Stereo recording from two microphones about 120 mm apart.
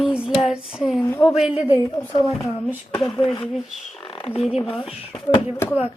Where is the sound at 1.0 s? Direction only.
25° left (ahead or behind).